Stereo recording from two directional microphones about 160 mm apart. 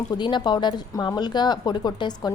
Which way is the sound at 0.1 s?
30° left (ahead or behind).